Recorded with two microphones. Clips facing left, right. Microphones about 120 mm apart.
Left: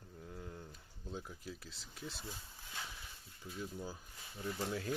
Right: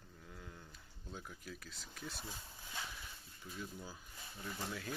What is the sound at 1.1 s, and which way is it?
Speech, 25° left (ahead or behind).